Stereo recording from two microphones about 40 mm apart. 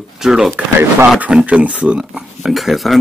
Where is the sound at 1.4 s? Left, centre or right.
Right.